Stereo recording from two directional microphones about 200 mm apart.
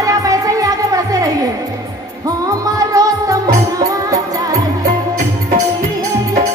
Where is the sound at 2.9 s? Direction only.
15° right (ahead or behind).